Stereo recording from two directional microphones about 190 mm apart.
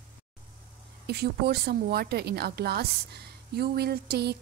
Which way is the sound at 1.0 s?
60° right (ahead or behind).